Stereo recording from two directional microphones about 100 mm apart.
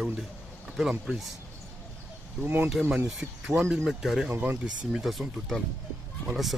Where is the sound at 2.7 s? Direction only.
5° right (ahead or behind).